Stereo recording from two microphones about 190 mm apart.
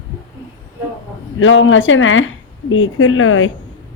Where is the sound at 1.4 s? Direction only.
90° left.